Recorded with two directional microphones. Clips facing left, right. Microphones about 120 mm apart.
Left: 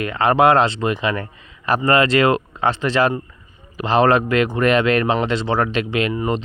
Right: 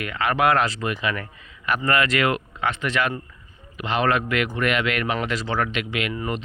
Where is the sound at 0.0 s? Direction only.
30° left (ahead or behind).